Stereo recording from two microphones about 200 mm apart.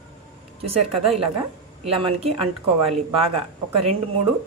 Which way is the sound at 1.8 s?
30° right (ahead or behind).